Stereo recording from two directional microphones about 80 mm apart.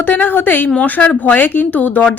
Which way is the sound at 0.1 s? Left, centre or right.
Left.